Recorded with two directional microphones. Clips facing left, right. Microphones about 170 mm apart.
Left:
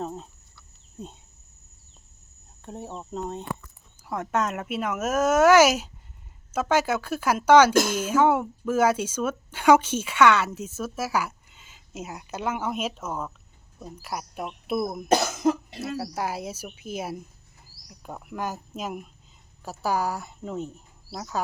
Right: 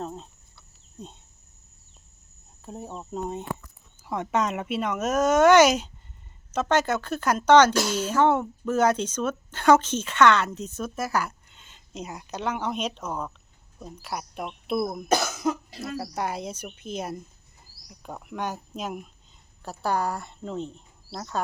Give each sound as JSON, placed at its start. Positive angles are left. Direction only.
{"t": 0.0, "sound": "speech", "side_deg": 5}
{"t": 2.6, "sound": "speech", "side_deg": 0}
{"t": 7.8, "sound": "speech", "side_deg": 50}
{"t": 8.0, "sound": "speech", "side_deg": 10}
{"t": 15.1, "sound": "cough", "side_deg": 25}
{"t": 15.8, "sound": "speech", "side_deg": 5}